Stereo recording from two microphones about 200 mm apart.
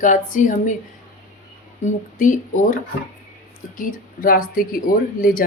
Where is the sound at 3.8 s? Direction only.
45° left (ahead or behind).